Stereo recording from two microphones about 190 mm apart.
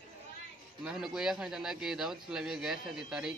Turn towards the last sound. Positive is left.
turn(degrees=-5)  # may be behind; listen again after turning